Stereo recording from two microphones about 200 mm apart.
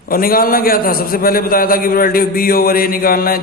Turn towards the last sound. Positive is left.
turn(degrees=45)  # may be behind; listen again after turning